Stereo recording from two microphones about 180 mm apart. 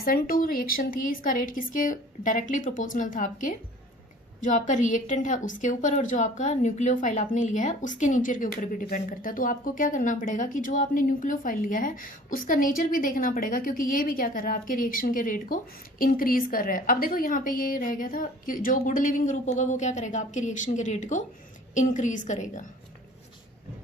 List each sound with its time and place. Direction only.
0.0 s a woman's voice: 55° left (ahead or behind)